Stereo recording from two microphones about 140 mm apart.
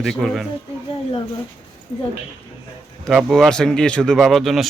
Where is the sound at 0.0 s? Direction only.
Centre (ahead or behind).